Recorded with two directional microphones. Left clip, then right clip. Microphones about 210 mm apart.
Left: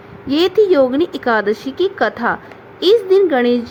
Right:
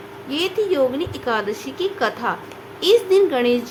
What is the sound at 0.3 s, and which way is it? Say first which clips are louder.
A woman's voice: left 8 dB; 35° left (ahead or behind).